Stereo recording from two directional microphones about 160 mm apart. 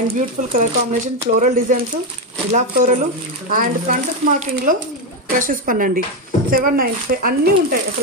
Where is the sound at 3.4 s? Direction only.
60° right (ahead or behind).